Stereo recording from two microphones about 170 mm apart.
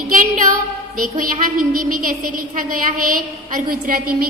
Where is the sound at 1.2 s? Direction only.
55° right (ahead or behind).